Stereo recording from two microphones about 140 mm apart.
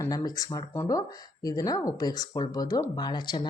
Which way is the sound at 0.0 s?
25° left (ahead or behind).